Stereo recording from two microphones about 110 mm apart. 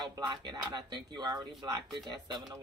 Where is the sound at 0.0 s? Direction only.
40° right (ahead or behind).